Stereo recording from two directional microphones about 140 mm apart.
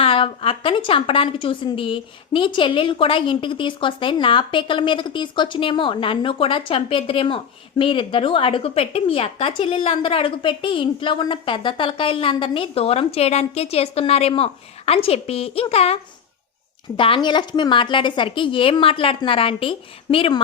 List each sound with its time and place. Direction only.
0.0 s a woman's voice: 45° left (ahead or behind)
17.0 s a woman's voice: 35° left (ahead or behind)